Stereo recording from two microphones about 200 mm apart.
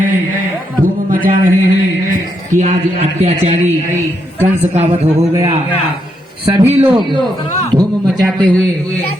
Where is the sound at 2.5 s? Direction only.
35° right (ahead or behind).